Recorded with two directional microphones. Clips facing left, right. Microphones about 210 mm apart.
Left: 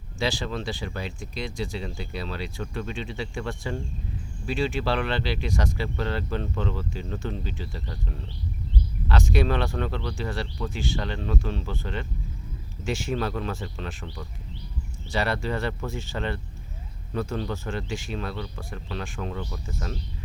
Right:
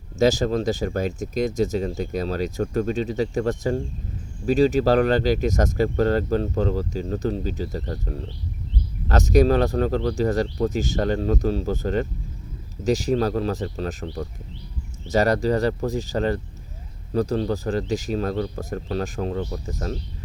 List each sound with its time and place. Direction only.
0.2 s speech: 40° right (ahead or behind)